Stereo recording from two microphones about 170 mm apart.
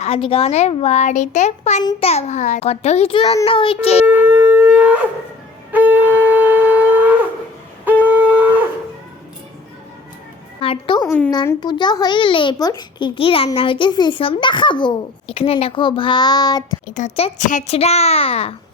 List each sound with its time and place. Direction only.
0.0 s a child's voice: 35° left (ahead or behind)
4.0 s shofar: 10° right (ahead or behind)
7.9 s wind instrument: 10° right (ahead or behind)
10.6 s a sound: 30° left (ahead or behind)
11.0 s a sound: 5° left (ahead or behind)
11.6 s a child's voice: 25° left (ahead or behind)
16.8 s a child's voice: 45° left (ahead or behind)